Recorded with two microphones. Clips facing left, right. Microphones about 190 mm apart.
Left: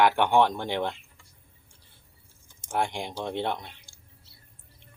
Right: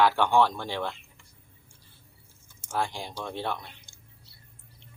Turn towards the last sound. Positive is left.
turn(degrees=-20)  # may be behind; listen again after turning